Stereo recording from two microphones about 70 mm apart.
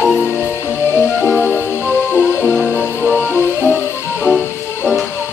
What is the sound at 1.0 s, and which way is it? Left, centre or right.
Music, centre.